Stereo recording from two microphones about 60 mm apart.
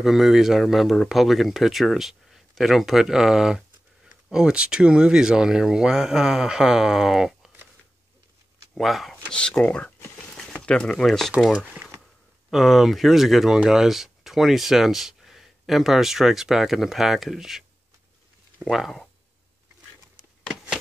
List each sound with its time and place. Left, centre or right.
0.0 s speech: centre
8.7 s speech: centre
9.3 s speech: centre
10.1 s a sound: centre
12.4 s speech: centre